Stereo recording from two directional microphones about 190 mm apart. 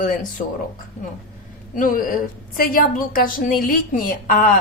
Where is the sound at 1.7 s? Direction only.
45° left (ahead or behind).